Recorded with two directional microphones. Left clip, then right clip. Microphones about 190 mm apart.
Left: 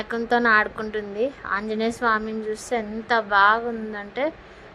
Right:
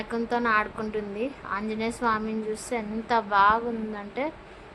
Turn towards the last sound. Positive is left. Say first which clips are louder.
# left 5 dB
turn(degrees=15)  # may be behind; listen again after turning